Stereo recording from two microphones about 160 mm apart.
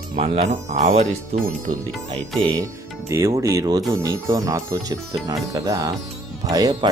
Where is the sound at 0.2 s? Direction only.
40° right (ahead or behind).